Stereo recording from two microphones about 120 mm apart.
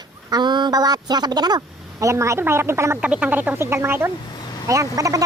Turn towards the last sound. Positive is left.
turn(degrees=-25)  # may be behind; listen again after turning